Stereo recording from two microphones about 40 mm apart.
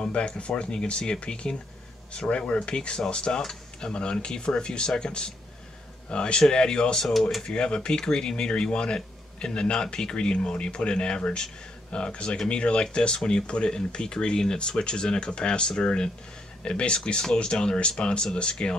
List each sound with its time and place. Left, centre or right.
0.0 s speech: left
7.1 s speech: centre
7.4 s speech: left